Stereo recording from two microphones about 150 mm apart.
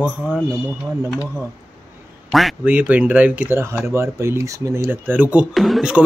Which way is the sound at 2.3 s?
5° right (ahead or behind).